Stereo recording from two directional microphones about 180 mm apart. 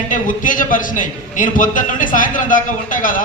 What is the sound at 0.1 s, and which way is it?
A man's voice, 50° left (ahead or behind).